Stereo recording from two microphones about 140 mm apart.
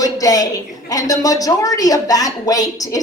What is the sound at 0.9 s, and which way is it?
Speech, 25° left (ahead or behind).